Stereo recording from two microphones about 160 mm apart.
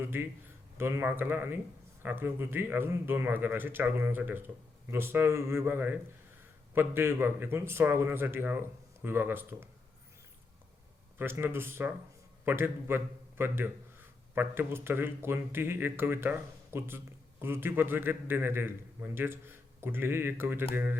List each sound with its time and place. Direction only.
0.0 s a man's voice: 15° right (ahead or behind)
11.2 s a man's voice: 15° right (ahead or behind)